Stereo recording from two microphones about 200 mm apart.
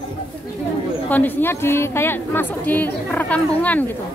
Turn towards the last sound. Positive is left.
turn(degrees=10)  # may be behind; listen again after turning